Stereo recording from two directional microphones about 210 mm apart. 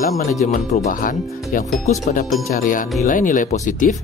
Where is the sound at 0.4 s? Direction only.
35° left (ahead or behind).